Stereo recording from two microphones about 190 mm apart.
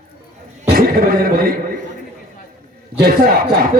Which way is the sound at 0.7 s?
50° right (ahead or behind).